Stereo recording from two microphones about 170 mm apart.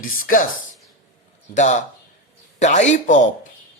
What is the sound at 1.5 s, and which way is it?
Speech, 45° left (ahead or behind).